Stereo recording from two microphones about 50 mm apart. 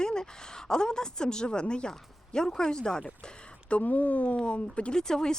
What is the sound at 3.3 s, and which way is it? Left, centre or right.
Speech, left.